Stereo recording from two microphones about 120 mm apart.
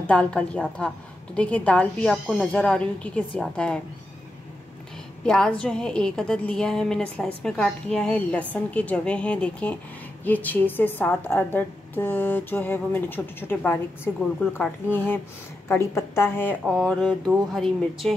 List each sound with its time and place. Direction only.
0.0 s a woman's voice: 10° left (ahead or behind)
5.2 s a woman's voice: 5° left (ahead or behind)
16.6 s speech: centre (ahead or behind)